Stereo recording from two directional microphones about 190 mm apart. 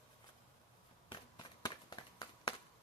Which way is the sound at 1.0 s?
25° left (ahead or behind).